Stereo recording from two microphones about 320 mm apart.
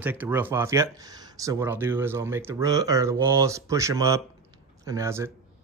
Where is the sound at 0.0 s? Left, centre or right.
Centre.